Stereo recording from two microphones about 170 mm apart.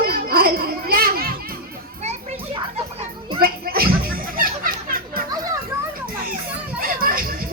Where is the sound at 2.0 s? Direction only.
40° right (ahead or behind).